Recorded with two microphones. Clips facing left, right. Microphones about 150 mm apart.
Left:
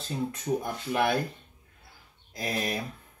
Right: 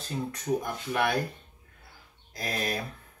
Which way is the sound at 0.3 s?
30° left (ahead or behind).